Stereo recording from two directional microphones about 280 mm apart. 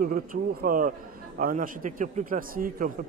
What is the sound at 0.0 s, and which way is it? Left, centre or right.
A man's voice, right.